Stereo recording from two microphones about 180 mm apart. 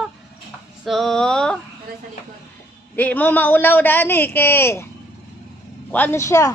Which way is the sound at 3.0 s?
10° left (ahead or behind).